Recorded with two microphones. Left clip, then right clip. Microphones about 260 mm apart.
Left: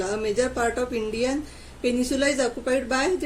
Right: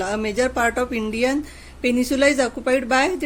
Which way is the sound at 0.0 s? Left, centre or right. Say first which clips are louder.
Right 3 dB; right.